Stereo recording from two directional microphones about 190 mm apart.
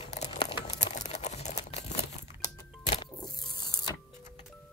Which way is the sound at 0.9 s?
40° left (ahead or behind).